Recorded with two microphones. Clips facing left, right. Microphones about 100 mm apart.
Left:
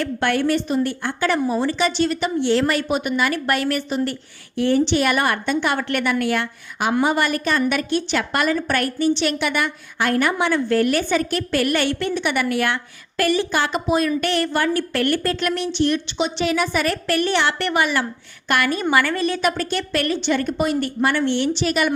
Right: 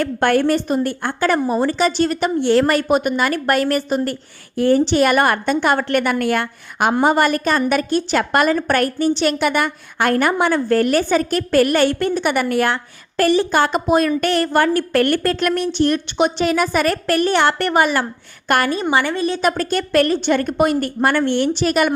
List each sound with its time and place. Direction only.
0.0 s a woman's voice: 45° right (ahead or behind)
18.7 s a woman's voice: 25° right (ahead or behind)
19.4 s a woman's voice: 40° right (ahead or behind)